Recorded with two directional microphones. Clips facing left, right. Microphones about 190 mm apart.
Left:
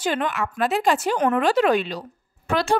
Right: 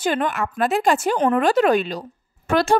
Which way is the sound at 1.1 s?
30° right (ahead or behind).